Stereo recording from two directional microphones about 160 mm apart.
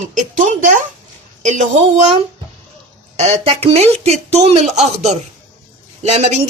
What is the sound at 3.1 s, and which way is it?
A woman's voice, 40° right (ahead or behind).